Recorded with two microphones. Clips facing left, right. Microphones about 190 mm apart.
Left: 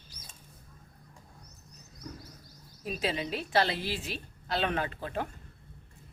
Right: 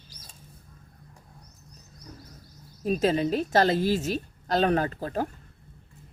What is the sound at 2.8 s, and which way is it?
A woman's voice, 45° right (ahead or behind).